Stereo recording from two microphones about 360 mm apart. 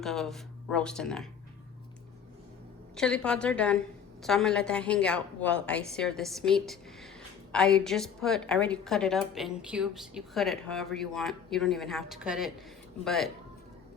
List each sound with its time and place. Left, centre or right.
0.0 s a woman's voice: centre
2.9 s a woman's voice: centre